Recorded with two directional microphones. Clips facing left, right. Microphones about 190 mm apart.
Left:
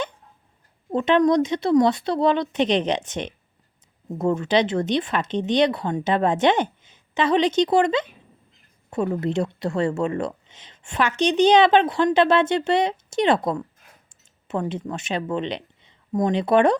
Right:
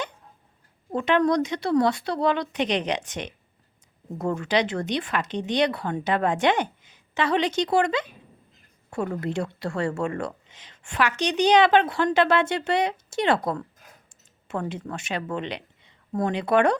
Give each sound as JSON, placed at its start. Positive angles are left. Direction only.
{"t": 0.9, "sound": "a woman's voice", "side_deg": 20}